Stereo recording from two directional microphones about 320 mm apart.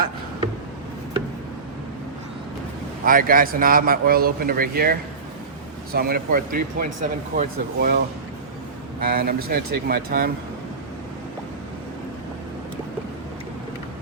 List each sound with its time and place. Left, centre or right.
3.0 s a man's voice: right